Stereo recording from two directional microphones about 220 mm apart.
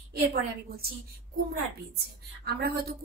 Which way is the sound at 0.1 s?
45° right (ahead or behind).